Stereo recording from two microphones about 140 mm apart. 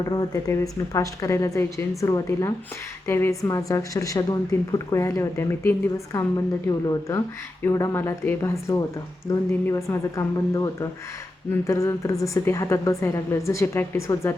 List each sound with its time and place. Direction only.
0.0 s a woman's voice: 25° left (ahead or behind)